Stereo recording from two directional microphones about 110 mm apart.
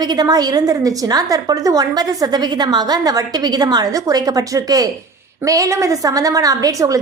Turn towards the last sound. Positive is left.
turn(degrees=-30)  # may be behind; listen again after turning